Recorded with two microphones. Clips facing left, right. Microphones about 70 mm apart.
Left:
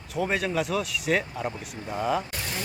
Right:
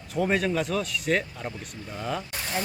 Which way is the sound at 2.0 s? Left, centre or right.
Centre.